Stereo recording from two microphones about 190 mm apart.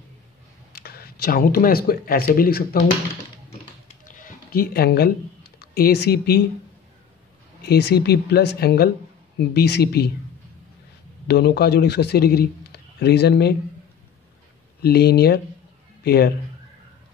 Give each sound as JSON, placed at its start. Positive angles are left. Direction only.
{"t": 0.7, "sound": "speech", "side_deg": 55}
{"t": 4.0, "sound": "a sound", "side_deg": 50}
{"t": 7.6, "sound": "a man's voice", "side_deg": 60}
{"t": 11.2, "sound": "a man's voice", "side_deg": 60}
{"t": 14.8, "sound": "a man's voice", "side_deg": 55}